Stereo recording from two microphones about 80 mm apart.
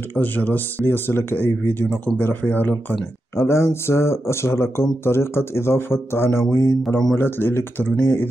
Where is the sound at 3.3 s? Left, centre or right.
Left.